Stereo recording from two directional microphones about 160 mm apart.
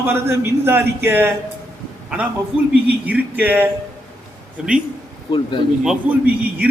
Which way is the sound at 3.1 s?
10° right (ahead or behind).